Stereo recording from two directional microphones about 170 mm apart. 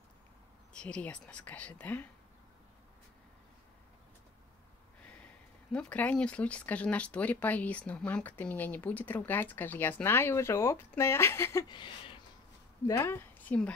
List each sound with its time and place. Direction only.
0.7 s speech: 5° left (ahead or behind)
5.7 s speech: 5° left (ahead or behind)
11.7 s a sound: 30° left (ahead or behind)
12.8 s a woman's voice: 15° left (ahead or behind)